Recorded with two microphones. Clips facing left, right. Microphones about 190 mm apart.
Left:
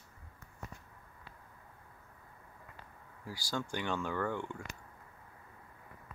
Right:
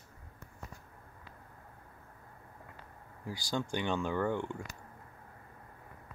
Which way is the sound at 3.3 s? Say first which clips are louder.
Right 3 dB; 20° right (ahead or behind).